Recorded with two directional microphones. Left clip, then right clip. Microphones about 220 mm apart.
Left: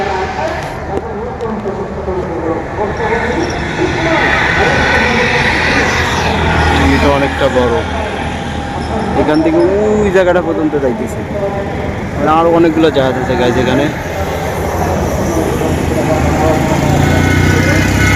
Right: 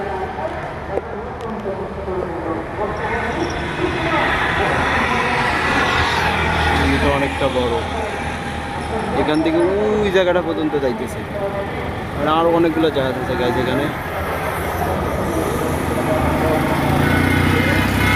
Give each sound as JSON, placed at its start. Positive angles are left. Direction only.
{"t": 3.0, "sound": "a sound", "side_deg": 0}
{"t": 4.8, "sound": "vehicle", "side_deg": 0}
{"t": 5.0, "sound": "vehicle", "side_deg": -55}
{"t": 5.7, "sound": "vehicle", "side_deg": 0}
{"t": 9.1, "sound": "a sound", "side_deg": -5}
{"t": 10.0, "sound": "speech", "side_deg": -5}
{"t": 12.2, "sound": "speech", "side_deg": -5}
{"t": 16.4, "sound": "vehicle", "side_deg": 0}